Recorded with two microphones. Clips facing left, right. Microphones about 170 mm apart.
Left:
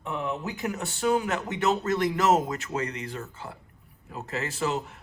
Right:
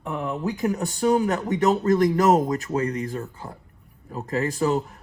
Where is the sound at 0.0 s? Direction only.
35° right (ahead or behind).